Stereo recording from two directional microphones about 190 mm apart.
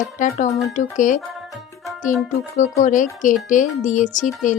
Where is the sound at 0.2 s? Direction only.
40° left (ahead or behind).